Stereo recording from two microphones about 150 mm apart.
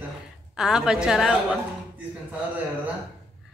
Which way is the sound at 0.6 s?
5° right (ahead or behind).